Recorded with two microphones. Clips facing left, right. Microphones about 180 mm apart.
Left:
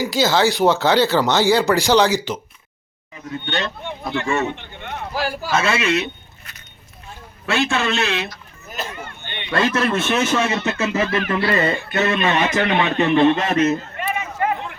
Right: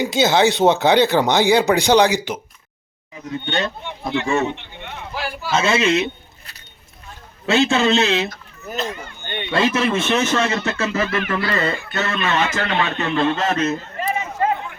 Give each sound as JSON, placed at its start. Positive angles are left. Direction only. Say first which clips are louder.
{"t": 0.0, "sound": "speech", "louder": "right 1 dB", "side_deg": -20}
{"t": 3.4, "sound": "speech", "louder": "right 2 dB", "side_deg": -20}
{"t": 3.8, "sound": "speech", "louder": "right 1 dB", "side_deg": 50}
{"t": 5.5, "sound": "speech", "louder": "right 3 dB", "side_deg": -20}
{"t": 7.4, "sound": "speech", "louder": "right 4 dB", "side_deg": -20}
{"t": 9.2, "sound": "a man's voice", "louder": "right 6 dB", "side_deg": -45}
{"t": 9.5, "sound": "speech", "louder": "right 1 dB", "side_deg": -20}
{"t": 9.7, "sound": "speech", "louder": "even", "side_deg": 0}
{"t": 12.3, "sound": "speech", "louder": "left 2 dB", "side_deg": 15}
{"t": 13.9, "sound": "a sound", "louder": "right 2 dB", "side_deg": -30}